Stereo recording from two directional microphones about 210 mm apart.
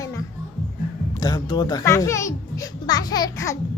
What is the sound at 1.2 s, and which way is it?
A child's voice, 20° left (ahead or behind).